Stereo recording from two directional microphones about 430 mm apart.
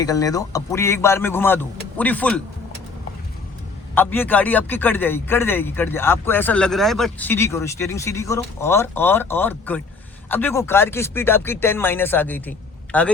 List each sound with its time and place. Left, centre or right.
0.0 s speech: centre
3.9 s speech: centre